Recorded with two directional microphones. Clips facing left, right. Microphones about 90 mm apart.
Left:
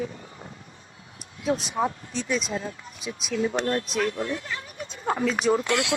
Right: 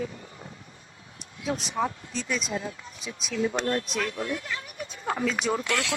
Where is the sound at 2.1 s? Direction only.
35° left (ahead or behind).